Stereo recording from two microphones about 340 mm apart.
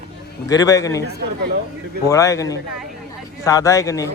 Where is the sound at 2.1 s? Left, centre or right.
Centre.